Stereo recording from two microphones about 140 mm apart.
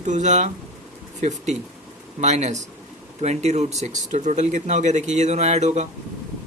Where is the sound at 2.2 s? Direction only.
55° right (ahead or behind).